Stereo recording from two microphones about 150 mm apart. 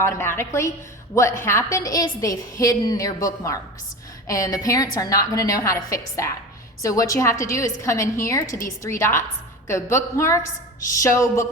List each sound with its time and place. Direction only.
0.0 s a woman's voice: 15° left (ahead or behind)